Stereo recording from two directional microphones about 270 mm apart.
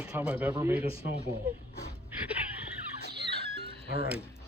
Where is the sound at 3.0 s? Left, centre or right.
Right.